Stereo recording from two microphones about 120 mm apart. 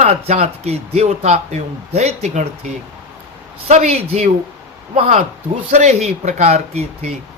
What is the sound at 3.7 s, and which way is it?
Speech, 65° right (ahead or behind).